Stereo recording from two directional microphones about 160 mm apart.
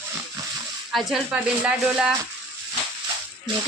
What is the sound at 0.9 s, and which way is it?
A woman's voice, centre (ahead or behind).